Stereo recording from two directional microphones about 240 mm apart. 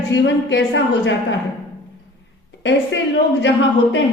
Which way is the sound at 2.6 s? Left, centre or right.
Left.